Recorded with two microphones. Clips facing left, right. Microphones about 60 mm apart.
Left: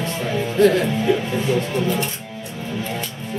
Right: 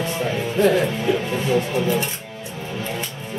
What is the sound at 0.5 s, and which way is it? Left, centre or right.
Music, centre.